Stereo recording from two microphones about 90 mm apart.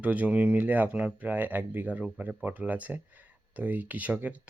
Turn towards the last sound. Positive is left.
turn(degrees=-15)  # may be behind; listen again after turning